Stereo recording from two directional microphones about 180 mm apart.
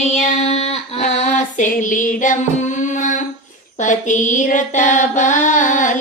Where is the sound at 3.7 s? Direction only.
45° left (ahead or behind).